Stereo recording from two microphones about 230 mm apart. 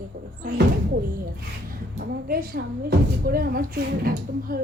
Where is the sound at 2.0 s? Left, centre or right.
Right.